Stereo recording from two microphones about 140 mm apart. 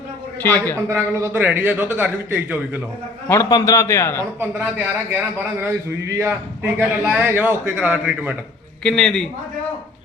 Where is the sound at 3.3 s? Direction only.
25° left (ahead or behind).